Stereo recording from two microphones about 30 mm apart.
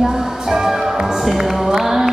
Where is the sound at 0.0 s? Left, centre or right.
Centre.